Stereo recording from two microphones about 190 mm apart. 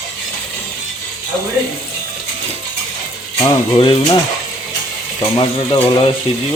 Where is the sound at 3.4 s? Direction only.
25° left (ahead or behind).